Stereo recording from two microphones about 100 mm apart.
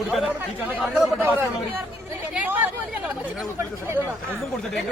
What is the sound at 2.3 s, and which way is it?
Hubbub, 15° right (ahead or behind).